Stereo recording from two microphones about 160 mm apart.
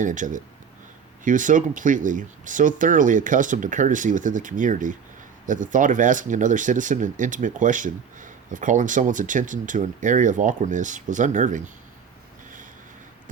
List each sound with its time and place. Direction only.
0.0 s speech: 50° right (ahead or behind)